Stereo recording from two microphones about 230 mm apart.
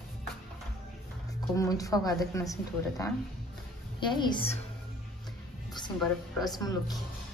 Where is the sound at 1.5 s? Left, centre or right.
Centre.